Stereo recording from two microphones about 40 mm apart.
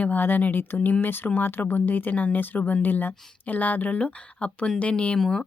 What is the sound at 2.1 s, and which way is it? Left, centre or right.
Speech, left.